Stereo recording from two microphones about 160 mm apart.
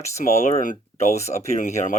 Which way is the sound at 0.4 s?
50° left (ahead or behind).